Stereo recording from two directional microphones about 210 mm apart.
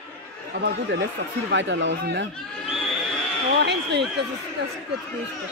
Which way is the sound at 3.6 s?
55° right (ahead or behind).